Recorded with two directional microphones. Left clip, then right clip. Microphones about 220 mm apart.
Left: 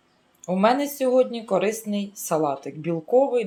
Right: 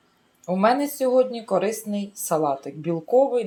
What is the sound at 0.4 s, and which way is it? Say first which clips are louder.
Speech: even; centre (ahead or behind).